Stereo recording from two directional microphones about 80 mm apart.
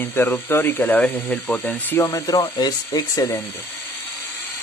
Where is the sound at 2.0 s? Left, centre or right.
Left.